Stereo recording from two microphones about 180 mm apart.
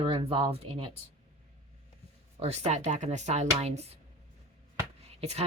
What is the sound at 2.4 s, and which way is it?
Speech, 35° right (ahead or behind).